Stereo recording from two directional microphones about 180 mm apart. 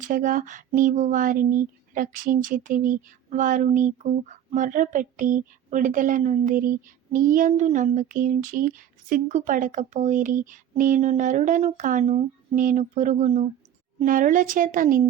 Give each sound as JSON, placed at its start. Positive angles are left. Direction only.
{"t": 0.0, "sound": "speech", "side_deg": -50}